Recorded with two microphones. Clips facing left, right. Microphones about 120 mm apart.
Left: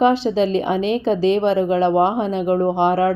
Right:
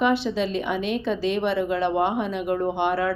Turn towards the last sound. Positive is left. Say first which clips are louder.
# left 6 dB
turn(degrees=40)  # may be behind; listen again after turning